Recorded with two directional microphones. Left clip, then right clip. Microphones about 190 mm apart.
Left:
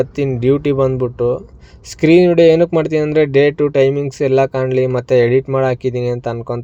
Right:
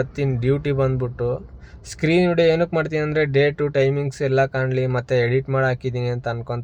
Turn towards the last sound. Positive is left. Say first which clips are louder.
# left 6 dB
turn(degrees=15)  # may be behind; listen again after turning